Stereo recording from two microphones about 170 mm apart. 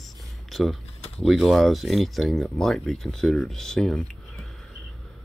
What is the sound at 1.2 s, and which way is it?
Speech, centre (ahead or behind).